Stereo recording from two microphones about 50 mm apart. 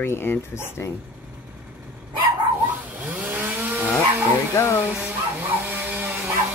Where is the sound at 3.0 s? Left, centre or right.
Right.